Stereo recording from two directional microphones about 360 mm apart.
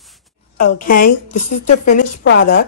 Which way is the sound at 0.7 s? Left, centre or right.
Left.